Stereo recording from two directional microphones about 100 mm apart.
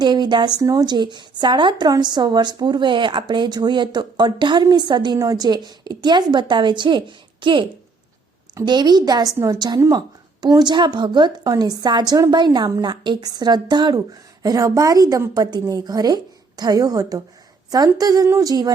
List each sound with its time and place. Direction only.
0.0 s a woman's voice: 50° right (ahead or behind)